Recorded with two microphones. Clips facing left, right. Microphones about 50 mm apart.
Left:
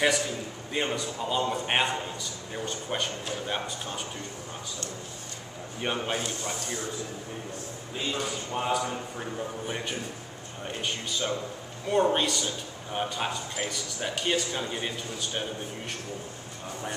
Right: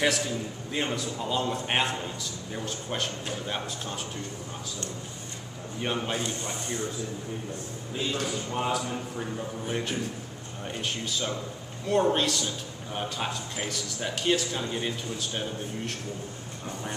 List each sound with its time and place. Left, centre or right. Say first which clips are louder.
0.7 s a man's voice: left 1 dB; centre
5.8 s a man's voice: even; centre
6.6 s a man's voice: right 2 dB; right
7.9 s a man's voice: right 1 dB; centre